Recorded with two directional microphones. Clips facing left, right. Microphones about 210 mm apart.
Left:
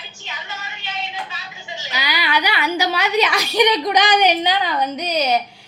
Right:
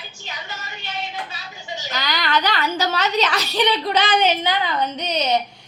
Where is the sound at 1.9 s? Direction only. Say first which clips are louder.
Even; 10° left (ahead or behind).